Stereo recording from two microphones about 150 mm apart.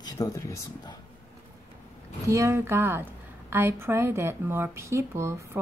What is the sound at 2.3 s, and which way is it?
Speech, 20° right (ahead or behind).